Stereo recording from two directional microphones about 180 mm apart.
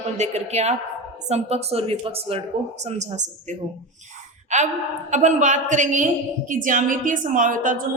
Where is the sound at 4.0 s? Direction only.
40° right (ahead or behind).